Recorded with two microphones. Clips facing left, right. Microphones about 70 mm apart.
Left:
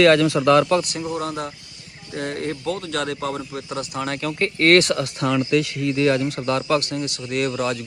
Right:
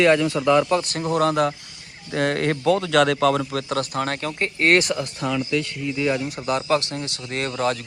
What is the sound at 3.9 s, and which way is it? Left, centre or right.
Speech, right.